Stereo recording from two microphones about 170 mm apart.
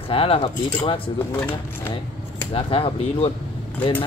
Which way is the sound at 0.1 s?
35° left (ahead or behind).